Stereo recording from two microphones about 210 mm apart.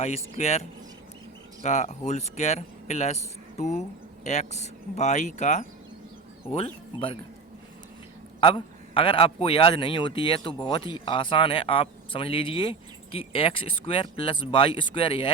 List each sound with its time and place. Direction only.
0.0 s speech: 30° left (ahead or behind)
1.6 s a man's voice: 35° left (ahead or behind)
8.4 s a man's voice: 25° left (ahead or behind)